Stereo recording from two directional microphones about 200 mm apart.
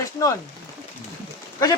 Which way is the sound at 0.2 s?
20° left (ahead or behind).